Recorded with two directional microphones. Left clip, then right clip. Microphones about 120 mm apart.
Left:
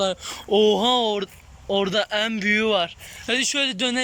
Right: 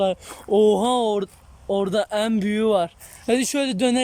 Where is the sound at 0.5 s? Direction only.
30° right (ahead or behind).